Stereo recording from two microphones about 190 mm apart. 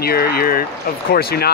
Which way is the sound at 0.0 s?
55° left (ahead or behind).